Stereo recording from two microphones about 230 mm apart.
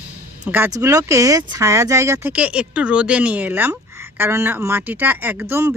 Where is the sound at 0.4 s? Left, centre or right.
Centre.